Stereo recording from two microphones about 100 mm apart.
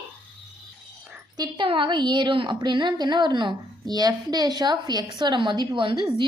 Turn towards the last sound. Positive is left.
turn(degrees=-55)  # may be behind; listen again after turning